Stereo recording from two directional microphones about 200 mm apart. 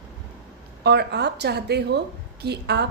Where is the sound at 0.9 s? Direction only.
55° right (ahead or behind).